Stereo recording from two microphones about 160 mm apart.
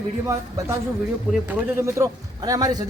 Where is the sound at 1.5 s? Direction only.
15° right (ahead or behind).